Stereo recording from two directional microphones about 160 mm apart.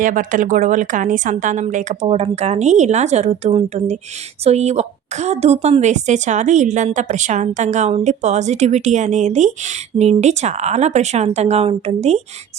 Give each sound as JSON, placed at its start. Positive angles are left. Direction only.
{"t": 0.0, "sound": "a woman's voice", "side_deg": -55}